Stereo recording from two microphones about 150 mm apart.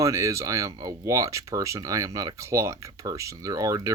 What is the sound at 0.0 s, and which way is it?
Speech, 20° right (ahead or behind).